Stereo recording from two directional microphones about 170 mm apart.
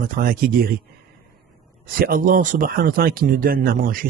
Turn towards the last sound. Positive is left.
turn(degrees=-55)  # may be behind; listen again after turning